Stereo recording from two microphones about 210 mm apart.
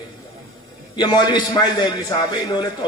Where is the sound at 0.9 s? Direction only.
20° left (ahead or behind).